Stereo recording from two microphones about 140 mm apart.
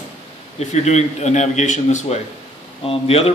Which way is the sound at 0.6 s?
55° left (ahead or behind).